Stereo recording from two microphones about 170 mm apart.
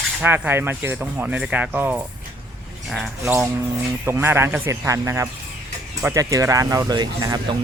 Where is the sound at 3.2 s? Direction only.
15° right (ahead or behind).